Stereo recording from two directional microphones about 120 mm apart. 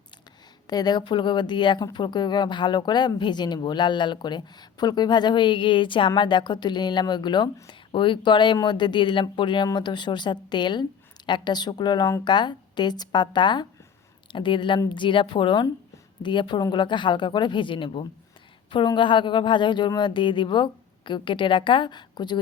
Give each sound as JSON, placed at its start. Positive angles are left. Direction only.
{"t": 0.7, "sound": "a woman's voice", "side_deg": 35}